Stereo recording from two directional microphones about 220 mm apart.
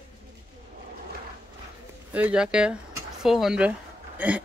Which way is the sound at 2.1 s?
5° right (ahead or behind).